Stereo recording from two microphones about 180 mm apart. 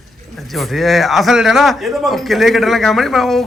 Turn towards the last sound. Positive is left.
turn(degrees=0)  # may be behind; listen again after turning